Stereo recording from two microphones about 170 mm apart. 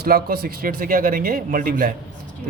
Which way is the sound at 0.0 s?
65° right (ahead or behind).